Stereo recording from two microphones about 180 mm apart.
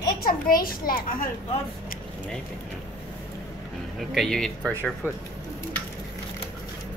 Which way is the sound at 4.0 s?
Centre (ahead or behind).